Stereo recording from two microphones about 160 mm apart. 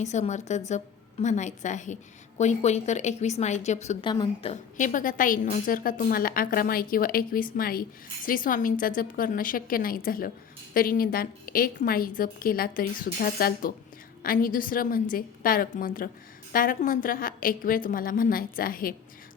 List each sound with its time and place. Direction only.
0.0 s speech: 45° left (ahead or behind)
4.0 s a woman's voice: 30° left (ahead or behind)
4.8 s a woman's voice: 55° left (ahead or behind)